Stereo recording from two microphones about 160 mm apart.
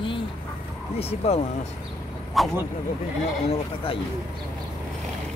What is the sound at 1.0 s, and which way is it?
Speech, 40° left (ahead or behind).